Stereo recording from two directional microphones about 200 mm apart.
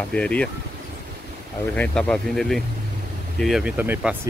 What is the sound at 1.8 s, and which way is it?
Speech, 5° left (ahead or behind).